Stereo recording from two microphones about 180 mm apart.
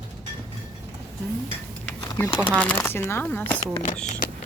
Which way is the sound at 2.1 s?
15° left (ahead or behind).